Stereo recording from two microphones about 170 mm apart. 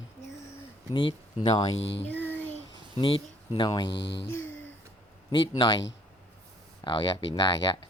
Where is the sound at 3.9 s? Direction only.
90° left.